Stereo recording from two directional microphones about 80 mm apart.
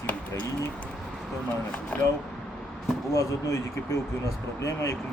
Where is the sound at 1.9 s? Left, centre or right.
Centre.